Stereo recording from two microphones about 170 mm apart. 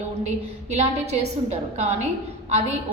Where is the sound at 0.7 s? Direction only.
40° right (ahead or behind).